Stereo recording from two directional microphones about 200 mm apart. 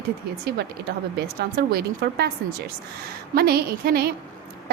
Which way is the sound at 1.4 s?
50° right (ahead or behind).